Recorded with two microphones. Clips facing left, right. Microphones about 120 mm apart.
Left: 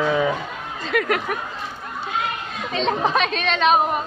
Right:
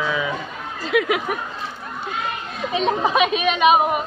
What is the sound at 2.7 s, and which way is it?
A woman's voice, 10° right (ahead or behind).